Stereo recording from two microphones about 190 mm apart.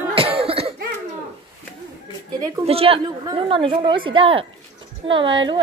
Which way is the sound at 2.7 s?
30° right (ahead or behind).